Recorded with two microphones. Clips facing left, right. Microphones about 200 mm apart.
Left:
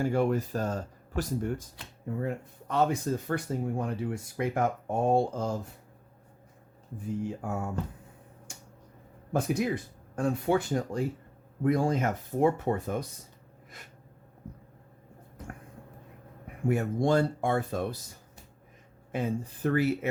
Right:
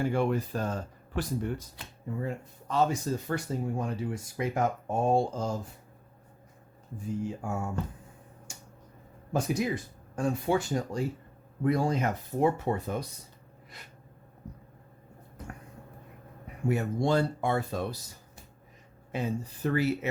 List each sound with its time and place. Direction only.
0.0 s speech: 40° left (ahead or behind)
2.0 s speech: 60° left (ahead or behind)
6.9 s speech: 60° left (ahead or behind)
8.5 s a sound: 55° left (ahead or behind)
9.3 s speech: 55° left (ahead or behind)
13.7 s a sound: 50° left (ahead or behind)
16.5 s speech: 50° left (ahead or behind)